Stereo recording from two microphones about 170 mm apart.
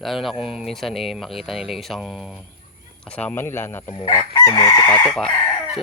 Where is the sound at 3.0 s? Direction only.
10° left (ahead or behind).